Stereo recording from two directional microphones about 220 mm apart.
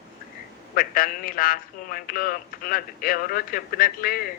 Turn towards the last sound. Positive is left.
turn(degrees=40)  # may be behind; listen again after turning